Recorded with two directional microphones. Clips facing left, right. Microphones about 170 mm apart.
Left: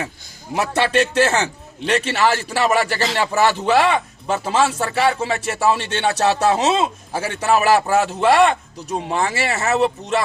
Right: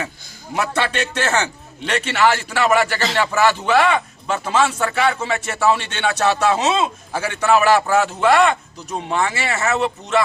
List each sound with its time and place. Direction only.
0.6 s a man's voice: 35° left (ahead or behind)